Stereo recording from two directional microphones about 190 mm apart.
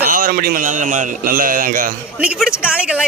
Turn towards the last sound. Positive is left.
turn(degrees=-5)  # may be behind; listen again after turning